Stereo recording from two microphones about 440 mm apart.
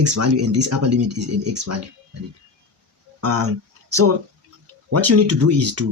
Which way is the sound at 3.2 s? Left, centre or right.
Right.